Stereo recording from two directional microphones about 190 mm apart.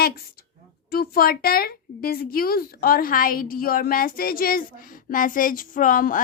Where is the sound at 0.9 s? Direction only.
55° left (ahead or behind).